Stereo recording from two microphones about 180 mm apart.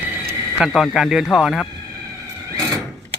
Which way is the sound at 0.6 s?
Centre (ahead or behind).